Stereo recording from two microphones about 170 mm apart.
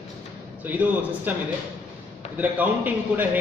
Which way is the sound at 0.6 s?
10° right (ahead or behind).